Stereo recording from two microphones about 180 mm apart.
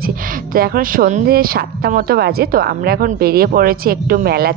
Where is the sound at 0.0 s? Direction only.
55° right (ahead or behind).